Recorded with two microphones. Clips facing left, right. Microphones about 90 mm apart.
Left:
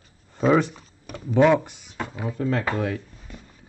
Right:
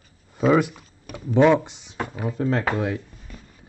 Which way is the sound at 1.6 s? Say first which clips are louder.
Right 2 dB; 20° right (ahead or behind).